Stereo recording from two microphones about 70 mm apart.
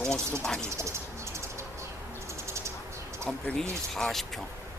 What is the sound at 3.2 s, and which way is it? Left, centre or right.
Speech, centre.